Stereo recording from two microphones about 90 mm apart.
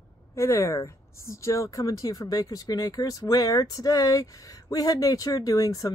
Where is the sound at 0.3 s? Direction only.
30° left (ahead or behind).